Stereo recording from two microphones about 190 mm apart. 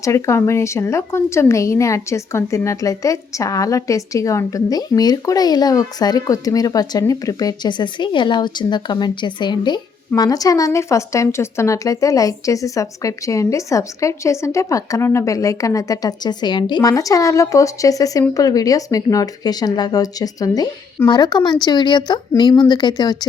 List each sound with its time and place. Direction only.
0.0 s a woman's voice: 15° left (ahead or behind)